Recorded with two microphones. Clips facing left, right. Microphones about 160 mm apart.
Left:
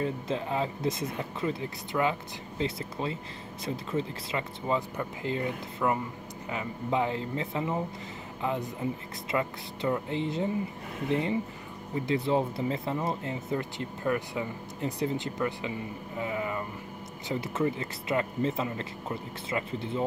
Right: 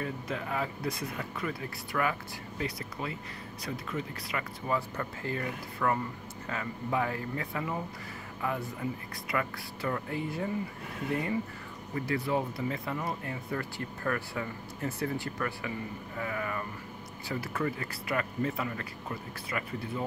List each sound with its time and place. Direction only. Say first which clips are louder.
0.0 s speech: left 5 dB; 25° left (ahead or behind)